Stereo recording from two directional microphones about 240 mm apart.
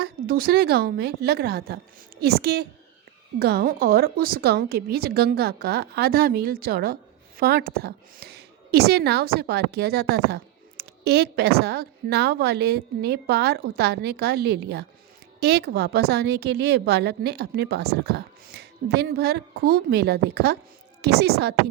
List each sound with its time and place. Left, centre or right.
0.0 s a woman's voice: right